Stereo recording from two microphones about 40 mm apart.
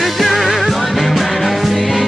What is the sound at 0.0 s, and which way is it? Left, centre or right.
Music, centre.